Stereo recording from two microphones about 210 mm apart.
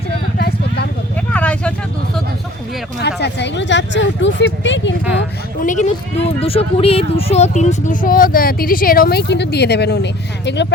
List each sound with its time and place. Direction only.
0.3 s a sound: 50° left (ahead or behind)
1.3 s vehicle: 5° left (ahead or behind)
3.0 s speech: 55° left (ahead or behind)
5.5 s speech: 35° left (ahead or behind); by 10.7 s 55° left (ahead or behind)